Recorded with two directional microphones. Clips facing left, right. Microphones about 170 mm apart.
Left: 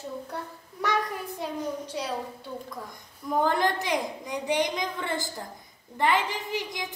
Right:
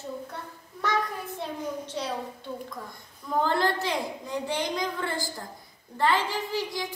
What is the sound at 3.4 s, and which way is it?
A woman's voice, 15° left (ahead or behind).